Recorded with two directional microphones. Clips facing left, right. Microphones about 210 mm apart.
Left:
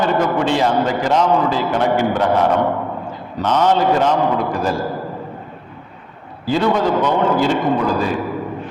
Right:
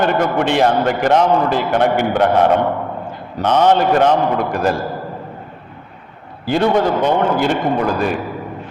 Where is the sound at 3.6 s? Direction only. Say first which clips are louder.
Right 2 dB; 60° right (ahead or behind).